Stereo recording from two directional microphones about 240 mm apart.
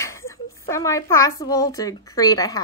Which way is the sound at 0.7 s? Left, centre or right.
Centre.